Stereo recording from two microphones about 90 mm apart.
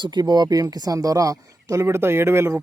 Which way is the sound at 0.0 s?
55° right (ahead or behind).